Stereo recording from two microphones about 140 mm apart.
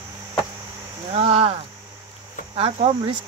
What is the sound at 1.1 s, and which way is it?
Speech, 45° right (ahead or behind).